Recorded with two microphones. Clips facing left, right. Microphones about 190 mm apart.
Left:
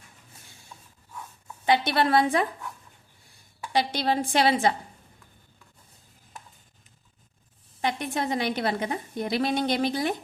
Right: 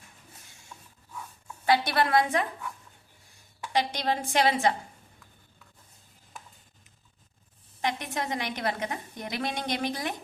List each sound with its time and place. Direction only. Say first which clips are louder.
1.6 s a woman's voice: left 2 dB; 20° left (ahead or behind)
3.7 s a woman's voice: left 3 dB; 30° left (ahead or behind)
7.8 s a woman's voice: left 3 dB; 30° left (ahead or behind)